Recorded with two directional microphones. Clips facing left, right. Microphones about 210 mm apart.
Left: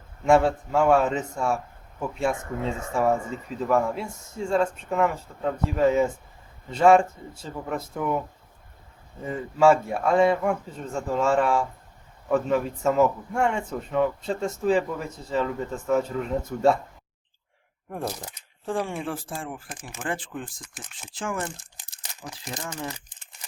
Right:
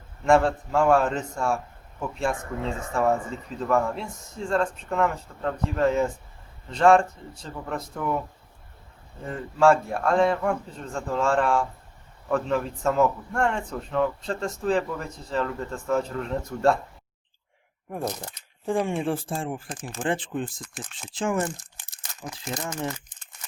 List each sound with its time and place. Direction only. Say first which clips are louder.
0.3 s speech: left 1 dB; 5° left (ahead or behind)
9.2 s speech: left 1 dB; 5° left (ahead or behind)
18.0 s speech: right 1 dB; 10° left (ahead or behind)
18.6 s speech: right 3 dB; 15° right (ahead or behind)
20.6 s speech: right 5 dB; 5° left (ahead or behind)
21.2 s speech: right 5 dB; 20° right (ahead or behind)